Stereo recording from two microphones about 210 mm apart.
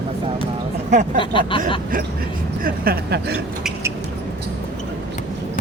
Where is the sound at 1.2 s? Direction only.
25° left (ahead or behind).